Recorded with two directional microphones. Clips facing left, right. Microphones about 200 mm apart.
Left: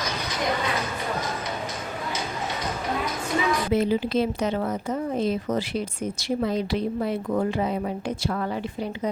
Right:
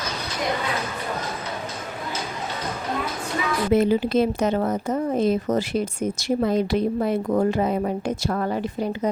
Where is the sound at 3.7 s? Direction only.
50° right (ahead or behind).